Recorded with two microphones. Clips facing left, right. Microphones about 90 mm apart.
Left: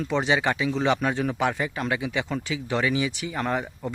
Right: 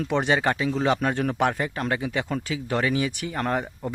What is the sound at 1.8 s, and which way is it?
Speech, 40° right (ahead or behind).